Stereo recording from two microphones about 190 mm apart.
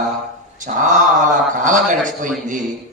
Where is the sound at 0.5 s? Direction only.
40° right (ahead or behind).